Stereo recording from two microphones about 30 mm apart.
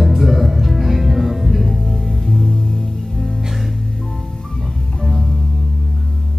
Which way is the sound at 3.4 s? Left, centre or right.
Centre.